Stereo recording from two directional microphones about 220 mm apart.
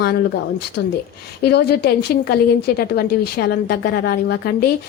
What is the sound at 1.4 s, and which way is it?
A woman's voice, 50° left (ahead or behind).